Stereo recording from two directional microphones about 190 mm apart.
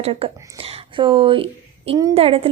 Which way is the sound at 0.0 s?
30° right (ahead or behind).